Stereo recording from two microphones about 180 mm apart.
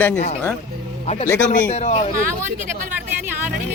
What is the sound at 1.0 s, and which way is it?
Speech, 35° left (ahead or behind).